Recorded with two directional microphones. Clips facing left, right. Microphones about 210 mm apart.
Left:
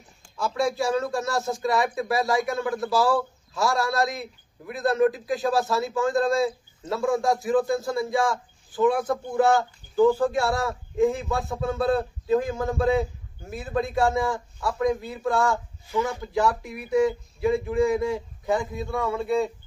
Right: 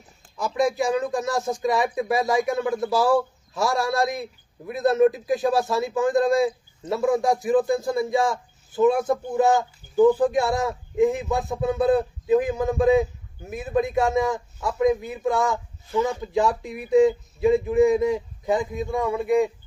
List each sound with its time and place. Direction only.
0.4 s speech: 15° right (ahead or behind)